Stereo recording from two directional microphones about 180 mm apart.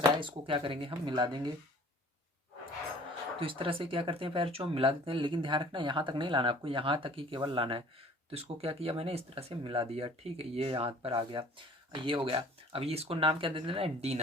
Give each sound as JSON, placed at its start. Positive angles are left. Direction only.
{"t": 0.2, "sound": "speech", "side_deg": -30}
{"t": 3.4, "sound": "speech", "side_deg": -30}